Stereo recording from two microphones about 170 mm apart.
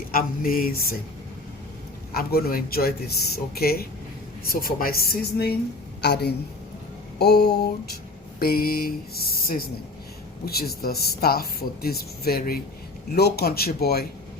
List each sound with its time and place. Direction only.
0.1 s speech: 55° left (ahead or behind)
2.1 s speech: 60° left (ahead or behind)
6.0 s a woman's voice: 80° left
8.4 s speech: 60° left (ahead or behind)